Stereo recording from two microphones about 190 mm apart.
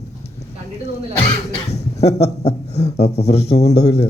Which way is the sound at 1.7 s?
35° left (ahead or behind).